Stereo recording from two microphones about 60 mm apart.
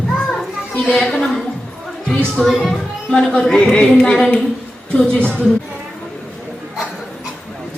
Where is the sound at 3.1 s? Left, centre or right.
Centre.